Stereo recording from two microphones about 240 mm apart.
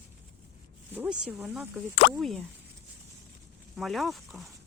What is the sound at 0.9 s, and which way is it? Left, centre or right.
Speech, centre.